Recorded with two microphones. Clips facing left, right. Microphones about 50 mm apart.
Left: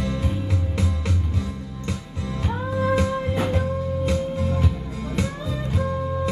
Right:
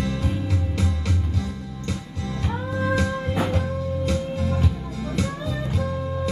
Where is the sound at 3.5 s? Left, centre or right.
Left.